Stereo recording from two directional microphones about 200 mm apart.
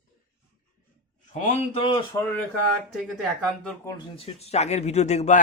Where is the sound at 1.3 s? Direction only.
35° left (ahead or behind).